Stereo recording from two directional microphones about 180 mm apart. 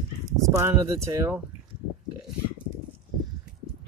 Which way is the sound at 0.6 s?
15° right (ahead or behind).